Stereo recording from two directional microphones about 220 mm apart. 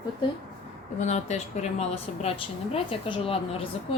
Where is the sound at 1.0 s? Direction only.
30° left (ahead or behind).